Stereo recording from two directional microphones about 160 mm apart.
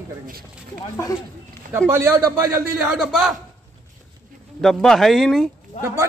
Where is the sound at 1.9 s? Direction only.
15° right (ahead or behind).